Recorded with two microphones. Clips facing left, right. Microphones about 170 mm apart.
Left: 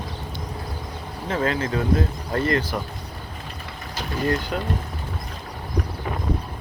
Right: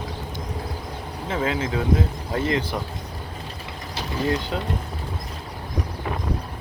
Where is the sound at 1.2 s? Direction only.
10° right (ahead or behind).